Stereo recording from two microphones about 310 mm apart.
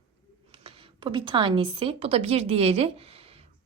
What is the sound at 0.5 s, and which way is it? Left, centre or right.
A woman's voice, centre.